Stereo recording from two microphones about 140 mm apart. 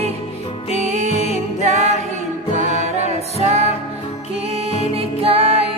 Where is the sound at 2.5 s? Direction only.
50° left (ahead or behind).